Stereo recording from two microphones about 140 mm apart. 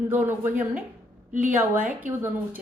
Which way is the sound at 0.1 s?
15° right (ahead or behind).